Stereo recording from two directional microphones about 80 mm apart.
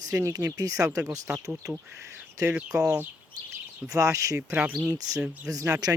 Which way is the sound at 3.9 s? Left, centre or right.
Right.